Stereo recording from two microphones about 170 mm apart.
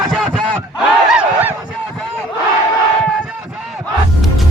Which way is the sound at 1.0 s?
10° right (ahead or behind).